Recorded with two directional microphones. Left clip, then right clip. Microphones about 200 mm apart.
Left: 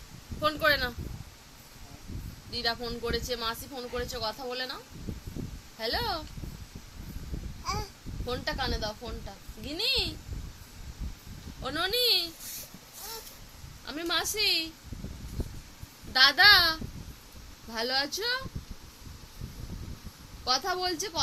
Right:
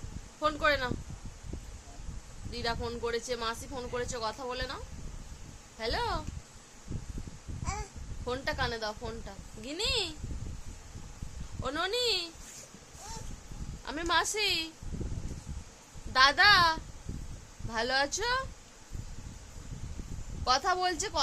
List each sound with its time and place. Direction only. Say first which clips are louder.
0.4 s speech: left 2 dB; 15° right (ahead or behind)
2.5 s speech: left 3 dB; 15° right (ahead or behind)
5.8 s speech: left 2 dB; 15° right (ahead or behind)
8.3 s speech: left 1 dB; 20° right (ahead or behind)
11.6 s speech: left 3 dB; 15° right (ahead or behind)
13.8 s speech: right 1 dB; 25° right (ahead or behind)
16.1 s speech: left 3 dB; 20° right (ahead or behind)
20.4 s speech: right 1 dB; 25° right (ahead or behind)